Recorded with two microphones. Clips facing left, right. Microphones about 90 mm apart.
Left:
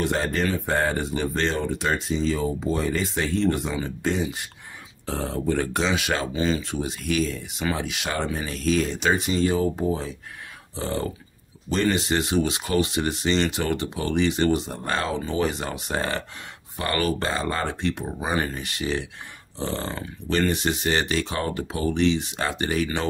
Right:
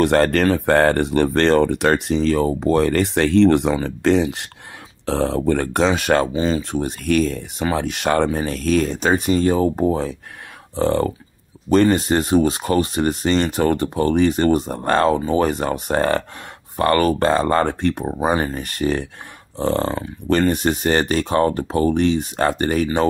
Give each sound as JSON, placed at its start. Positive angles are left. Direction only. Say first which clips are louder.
{"t": 0.0, "sound": "speech", "louder": "right 9 dB", "side_deg": -70}
{"t": 6.3, "sound": "speech", "louder": "right 4 dB", "side_deg": -30}
{"t": 6.6, "sound": "speech", "louder": "right 6 dB", "side_deg": -55}
{"t": 18.0, "sound": "speech", "louder": "right 7 dB", "side_deg": -35}